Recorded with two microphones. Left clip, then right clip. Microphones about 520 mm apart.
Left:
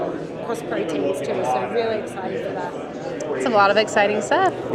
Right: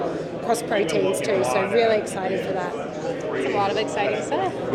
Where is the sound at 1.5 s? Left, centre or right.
Right.